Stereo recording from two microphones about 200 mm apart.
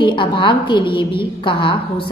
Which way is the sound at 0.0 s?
25° left (ahead or behind).